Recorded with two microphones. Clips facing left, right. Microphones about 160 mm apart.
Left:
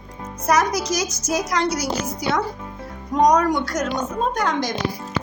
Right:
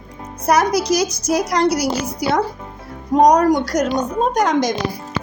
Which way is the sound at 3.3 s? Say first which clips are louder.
Right 4 dB; 35° right (ahead or behind).